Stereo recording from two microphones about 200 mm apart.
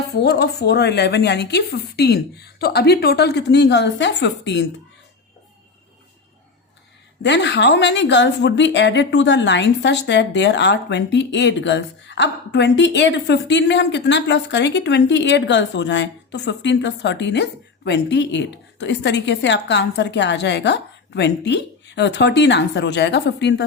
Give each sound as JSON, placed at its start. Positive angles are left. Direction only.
{"t": 0.2, "sound": "speech", "side_deg": 55}
{"t": 7.2, "sound": "speech", "side_deg": 60}